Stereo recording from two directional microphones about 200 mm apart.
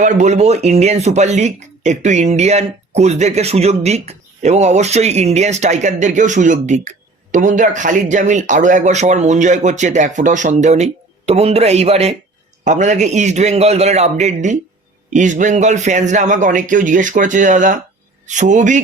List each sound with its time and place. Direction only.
0.0 s speech: 35° right (ahead or behind)